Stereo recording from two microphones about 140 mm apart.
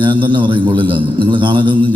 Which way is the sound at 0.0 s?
35° right (ahead or behind).